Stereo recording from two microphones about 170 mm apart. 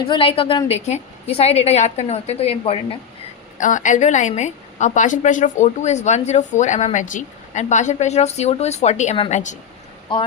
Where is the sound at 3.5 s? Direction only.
50° left (ahead or behind).